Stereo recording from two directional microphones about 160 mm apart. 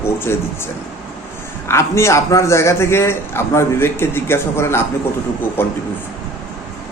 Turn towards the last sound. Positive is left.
turn(degrees=15)  # may be behind; listen again after turning